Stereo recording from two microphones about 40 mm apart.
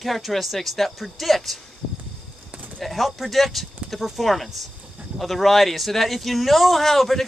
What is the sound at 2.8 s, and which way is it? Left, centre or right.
Speech, centre.